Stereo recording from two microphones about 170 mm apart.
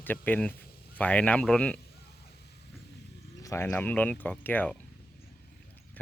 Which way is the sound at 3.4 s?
15° left (ahead or behind).